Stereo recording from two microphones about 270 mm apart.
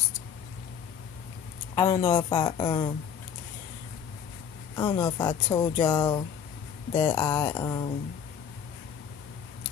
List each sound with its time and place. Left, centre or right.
1.8 s speech: centre
4.7 s speech: centre